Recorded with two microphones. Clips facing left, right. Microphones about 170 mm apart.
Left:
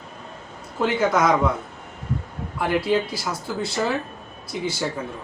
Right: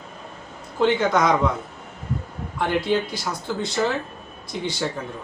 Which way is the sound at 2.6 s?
5° left (ahead or behind).